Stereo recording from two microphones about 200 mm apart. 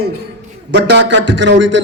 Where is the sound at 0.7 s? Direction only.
60° right (ahead or behind).